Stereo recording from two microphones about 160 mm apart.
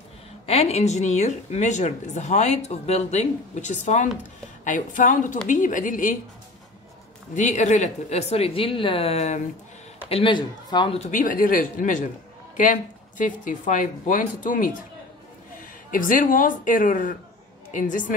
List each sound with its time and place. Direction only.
0.5 s speech: 40° left (ahead or behind)
7.3 s a man's voice: 50° left (ahead or behind); by 11.0 s 30° left (ahead or behind)
11.0 s speech: 55° left (ahead or behind)
13.2 s speech: 55° left (ahead or behind)
15.9 s a woman's voice: 60° left (ahead or behind)